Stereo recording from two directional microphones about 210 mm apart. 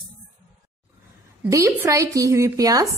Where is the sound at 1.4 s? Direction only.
15° right (ahead or behind).